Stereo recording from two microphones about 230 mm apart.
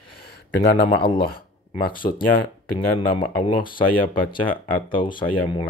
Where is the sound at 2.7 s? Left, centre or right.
Left.